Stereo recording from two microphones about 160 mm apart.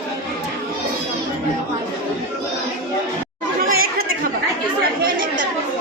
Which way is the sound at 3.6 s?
65° right (ahead or behind).